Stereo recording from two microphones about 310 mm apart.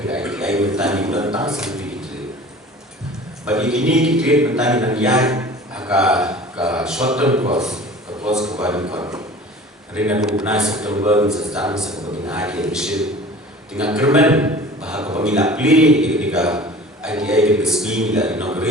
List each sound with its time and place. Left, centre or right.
0.1 s a man's voice: centre
3.4 s a man's voice: centre